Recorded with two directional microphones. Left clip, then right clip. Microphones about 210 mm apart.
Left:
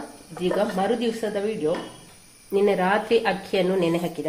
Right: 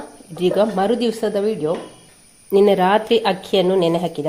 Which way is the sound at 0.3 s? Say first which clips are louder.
Right 6 dB; 45° right (ahead or behind).